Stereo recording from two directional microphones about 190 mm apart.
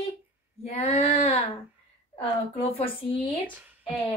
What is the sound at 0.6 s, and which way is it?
A woman's voice, 35° left (ahead or behind).